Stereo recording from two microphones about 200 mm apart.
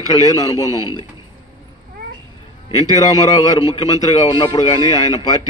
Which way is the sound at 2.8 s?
20° left (ahead or behind).